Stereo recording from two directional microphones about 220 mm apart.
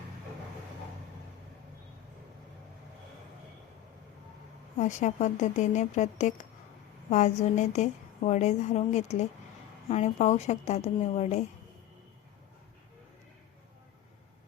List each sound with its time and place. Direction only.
4.8 s a woman's voice: 30° left (ahead or behind)